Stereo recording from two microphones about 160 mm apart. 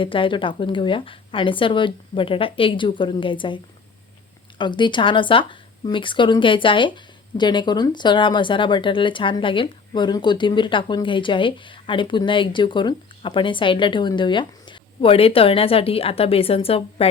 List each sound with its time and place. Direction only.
0.0 s speech: 30° left (ahead or behind)